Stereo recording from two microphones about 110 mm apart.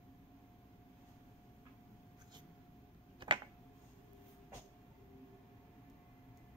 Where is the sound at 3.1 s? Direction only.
45° right (ahead or behind).